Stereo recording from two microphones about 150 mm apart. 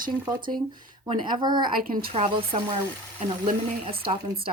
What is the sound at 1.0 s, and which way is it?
Speech, 30° right (ahead or behind).